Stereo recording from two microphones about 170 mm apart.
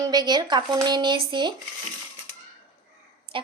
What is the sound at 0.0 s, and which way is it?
Speech, 25° right (ahead or behind).